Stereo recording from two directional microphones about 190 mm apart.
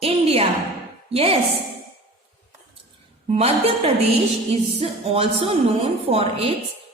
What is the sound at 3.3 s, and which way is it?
A woman's voice, 30° right (ahead or behind).